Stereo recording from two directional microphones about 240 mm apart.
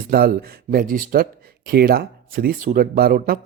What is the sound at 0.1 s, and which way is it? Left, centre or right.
Speech, right.